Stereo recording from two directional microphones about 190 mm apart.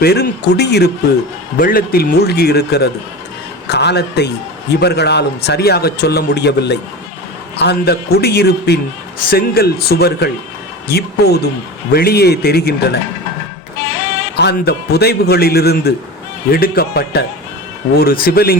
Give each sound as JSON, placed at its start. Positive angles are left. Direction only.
{"t": 0.0, "sound": "speech", "side_deg": 55}
{"t": 1.5, "sound": "a man's voice", "side_deg": 50}
{"t": 14.3, "sound": "a man's voice", "side_deg": 60}